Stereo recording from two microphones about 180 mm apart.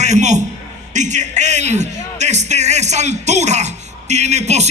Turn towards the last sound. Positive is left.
turn(degrees=-40)  # may be behind; listen again after turning